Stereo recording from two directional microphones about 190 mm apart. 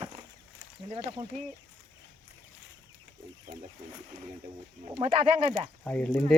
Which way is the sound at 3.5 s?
45° right (ahead or behind).